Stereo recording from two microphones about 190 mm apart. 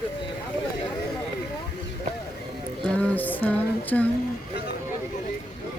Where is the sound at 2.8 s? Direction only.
5° left (ahead or behind).